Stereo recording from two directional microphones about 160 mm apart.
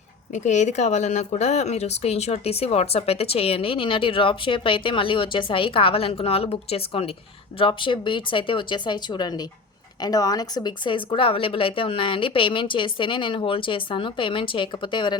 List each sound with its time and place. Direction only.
0.3 s speech: 45° left (ahead or behind); by 15.2 s 30° left (ahead or behind)